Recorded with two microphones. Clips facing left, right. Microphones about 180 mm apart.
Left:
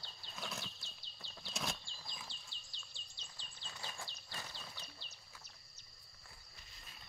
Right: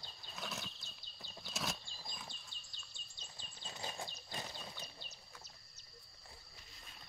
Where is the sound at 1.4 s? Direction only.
Centre (ahead or behind).